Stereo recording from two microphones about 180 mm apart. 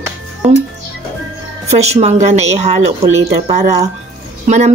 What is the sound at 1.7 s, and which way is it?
Speech, 35° right (ahead or behind).